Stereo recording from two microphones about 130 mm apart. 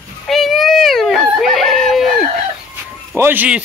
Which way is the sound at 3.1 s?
15° right (ahead or behind).